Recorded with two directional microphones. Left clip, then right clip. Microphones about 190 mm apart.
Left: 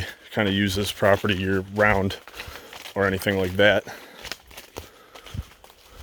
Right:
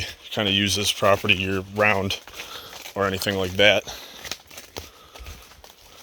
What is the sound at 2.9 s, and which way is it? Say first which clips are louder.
Speech: left 1 dB; 40° left (ahead or behind).